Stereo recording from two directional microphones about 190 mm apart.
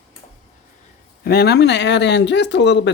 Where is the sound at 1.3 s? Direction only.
55° left (ahead or behind).